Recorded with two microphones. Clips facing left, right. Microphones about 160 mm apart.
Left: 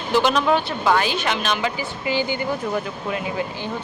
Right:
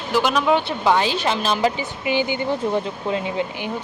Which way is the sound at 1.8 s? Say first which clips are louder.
Right 1 dB; 20° right (ahead or behind).